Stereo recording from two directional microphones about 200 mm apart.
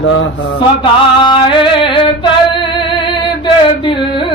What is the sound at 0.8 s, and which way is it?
Music, 25° left (ahead or behind).